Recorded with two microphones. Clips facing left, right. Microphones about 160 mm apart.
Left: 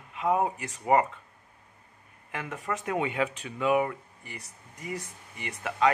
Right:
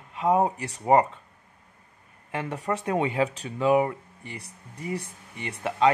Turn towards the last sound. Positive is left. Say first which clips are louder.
# right 3 dB
turn(degrees=-30)  # may be behind; listen again after turning